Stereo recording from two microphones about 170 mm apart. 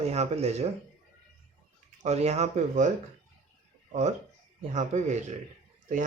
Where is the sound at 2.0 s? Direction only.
40° right (ahead or behind).